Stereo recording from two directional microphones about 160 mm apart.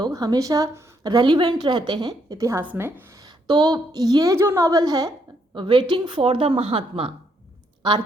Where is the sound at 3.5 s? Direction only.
25° right (ahead or behind).